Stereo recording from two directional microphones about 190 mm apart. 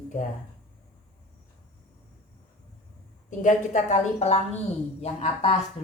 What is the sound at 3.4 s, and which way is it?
A woman's voice, 40° left (ahead or behind).